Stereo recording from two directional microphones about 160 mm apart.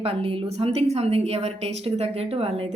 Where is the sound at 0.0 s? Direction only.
35° right (ahead or behind).